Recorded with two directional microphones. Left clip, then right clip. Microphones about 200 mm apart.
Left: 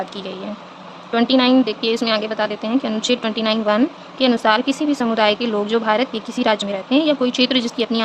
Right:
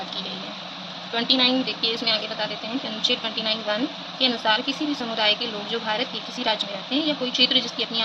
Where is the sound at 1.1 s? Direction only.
55° left (ahead or behind).